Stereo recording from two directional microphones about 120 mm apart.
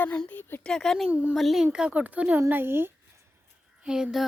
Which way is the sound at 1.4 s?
Centre (ahead or behind).